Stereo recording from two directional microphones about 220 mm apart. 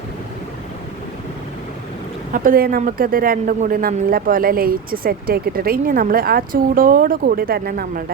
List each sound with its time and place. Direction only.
2.3 s a woman's voice: 40° right (ahead or behind)